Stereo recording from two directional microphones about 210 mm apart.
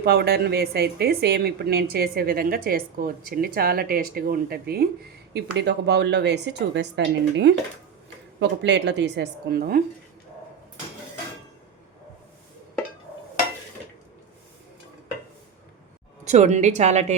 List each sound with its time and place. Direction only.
0.0 s a woman's voice: 50° right (ahead or behind)
16.2 s a woman's voice: 35° right (ahead or behind)